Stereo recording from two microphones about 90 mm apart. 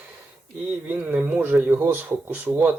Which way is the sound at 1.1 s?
20° right (ahead or behind).